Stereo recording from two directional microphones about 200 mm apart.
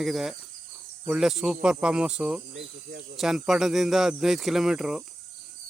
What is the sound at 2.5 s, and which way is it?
Speech, 60° right (ahead or behind).